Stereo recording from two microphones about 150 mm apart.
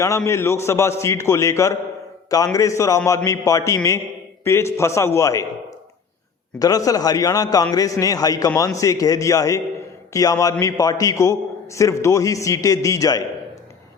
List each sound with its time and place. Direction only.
0.3 s a man's voice: 20° left (ahead or behind)
6.6 s a man's voice: 25° left (ahead or behind)